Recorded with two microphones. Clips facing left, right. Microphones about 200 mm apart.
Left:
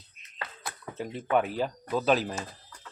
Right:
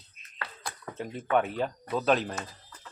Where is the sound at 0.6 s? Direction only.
5° left (ahead or behind).